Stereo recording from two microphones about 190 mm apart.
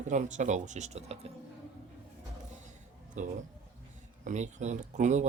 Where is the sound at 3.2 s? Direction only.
40° right (ahead or behind).